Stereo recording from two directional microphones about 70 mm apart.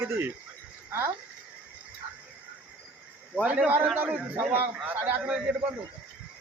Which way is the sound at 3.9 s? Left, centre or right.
Right.